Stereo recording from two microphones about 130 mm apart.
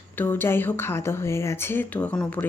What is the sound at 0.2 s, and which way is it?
A woman's voice, 15° left (ahead or behind).